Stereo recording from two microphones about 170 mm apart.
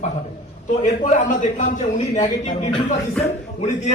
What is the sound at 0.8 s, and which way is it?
A man's voice, 40° left (ahead or behind).